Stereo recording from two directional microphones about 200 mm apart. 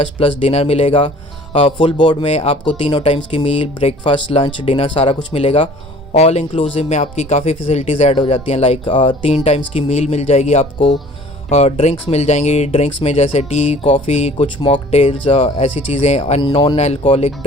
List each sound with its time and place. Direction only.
0.0 s speech: 30° left (ahead or behind)